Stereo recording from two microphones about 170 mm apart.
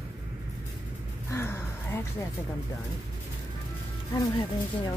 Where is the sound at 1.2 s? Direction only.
15° left (ahead or behind).